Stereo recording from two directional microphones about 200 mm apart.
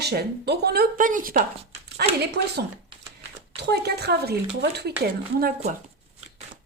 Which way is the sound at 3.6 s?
55° right (ahead or behind).